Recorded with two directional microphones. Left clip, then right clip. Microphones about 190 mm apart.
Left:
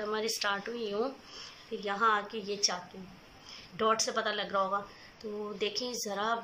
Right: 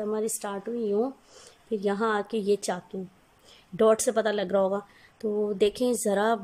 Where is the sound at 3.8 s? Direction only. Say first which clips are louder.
Right 7 dB; 55° right (ahead or behind).